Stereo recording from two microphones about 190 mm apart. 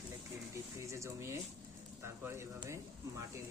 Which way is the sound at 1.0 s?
15° right (ahead or behind).